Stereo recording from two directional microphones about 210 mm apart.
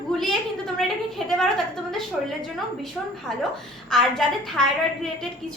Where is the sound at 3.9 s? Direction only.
Centre (ahead or behind).